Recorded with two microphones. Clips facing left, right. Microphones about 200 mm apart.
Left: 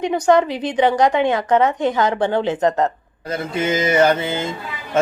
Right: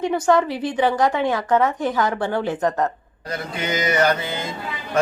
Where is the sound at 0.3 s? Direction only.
20° left (ahead or behind).